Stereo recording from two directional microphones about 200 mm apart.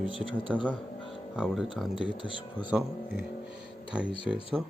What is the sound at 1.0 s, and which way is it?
Music, 25° left (ahead or behind).